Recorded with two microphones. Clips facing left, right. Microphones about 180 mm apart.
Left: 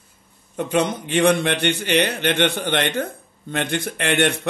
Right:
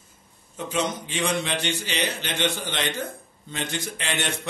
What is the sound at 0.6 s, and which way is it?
A man's voice, 60° left (ahead or behind).